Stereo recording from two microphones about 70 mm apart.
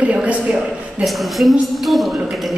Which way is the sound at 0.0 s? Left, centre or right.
Centre.